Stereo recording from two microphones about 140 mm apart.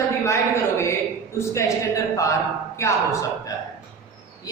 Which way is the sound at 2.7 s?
20° left (ahead or behind).